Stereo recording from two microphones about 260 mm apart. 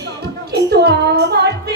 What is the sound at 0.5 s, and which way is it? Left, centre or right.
Child singing, right.